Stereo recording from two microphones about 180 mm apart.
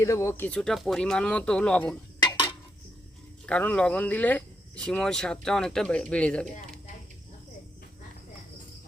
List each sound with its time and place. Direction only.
0.0 s speech: 15° left (ahead or behind)
2.2 s dishes: 25° left (ahead or behind)
3.4 s speech: 10° left (ahead or behind)